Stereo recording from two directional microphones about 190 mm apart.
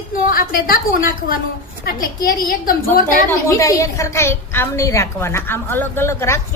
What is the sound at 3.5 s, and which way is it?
A woman's voice, 15° left (ahead or behind).